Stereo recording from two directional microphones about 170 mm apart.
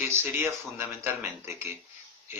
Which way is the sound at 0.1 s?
15° right (ahead or behind).